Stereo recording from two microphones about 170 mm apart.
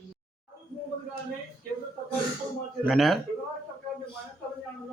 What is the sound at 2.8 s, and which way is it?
Speech, centre (ahead or behind).